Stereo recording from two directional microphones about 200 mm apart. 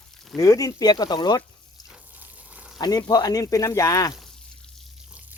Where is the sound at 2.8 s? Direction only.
20° left (ahead or behind).